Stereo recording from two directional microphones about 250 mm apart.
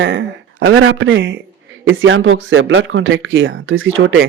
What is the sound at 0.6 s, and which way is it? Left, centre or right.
Speech, right.